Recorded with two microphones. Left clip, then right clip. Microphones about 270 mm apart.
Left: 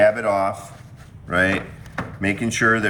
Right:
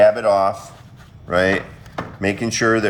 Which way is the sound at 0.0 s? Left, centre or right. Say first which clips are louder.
Right 4 dB; centre.